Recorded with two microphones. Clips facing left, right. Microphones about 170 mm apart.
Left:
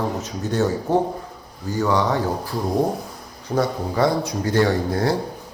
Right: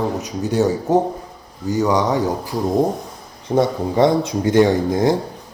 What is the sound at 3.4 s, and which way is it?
A man's voice, 20° right (ahead or behind).